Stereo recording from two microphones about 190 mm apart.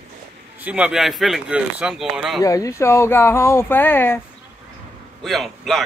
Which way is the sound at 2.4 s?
15° left (ahead or behind).